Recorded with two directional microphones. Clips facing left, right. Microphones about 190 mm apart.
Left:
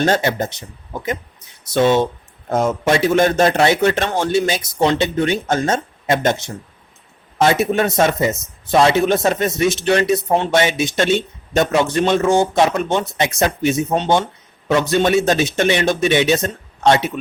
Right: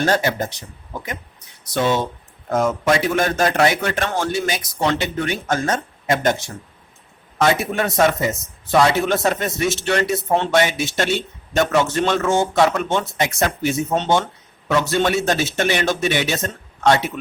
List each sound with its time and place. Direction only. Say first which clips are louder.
0.0 s a man's voice: left 2 dB; 25° left (ahead or behind)
1.7 s a man's voice: left 5 dB; 25° left (ahead or behind)